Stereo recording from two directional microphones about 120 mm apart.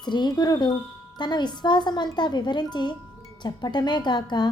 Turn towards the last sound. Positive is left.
turn(degrees=40)  # may be behind; listen again after turning